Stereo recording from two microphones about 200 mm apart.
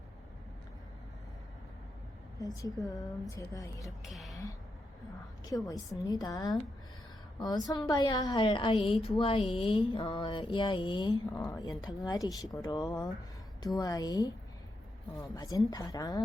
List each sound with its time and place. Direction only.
2.6 s a woman's voice: 20° left (ahead or behind)
4.1 s speech: centre (ahead or behind)
5.5 s a woman's voice: 20° left (ahead or behind)